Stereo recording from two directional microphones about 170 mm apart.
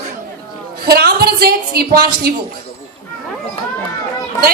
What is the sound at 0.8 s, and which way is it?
A woman's voice, 65° right (ahead or behind).